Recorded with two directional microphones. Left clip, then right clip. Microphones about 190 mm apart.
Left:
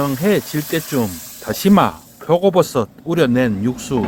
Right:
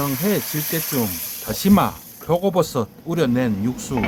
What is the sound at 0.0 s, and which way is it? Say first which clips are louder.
Speech: left 5 dB; 20° left (ahead or behind).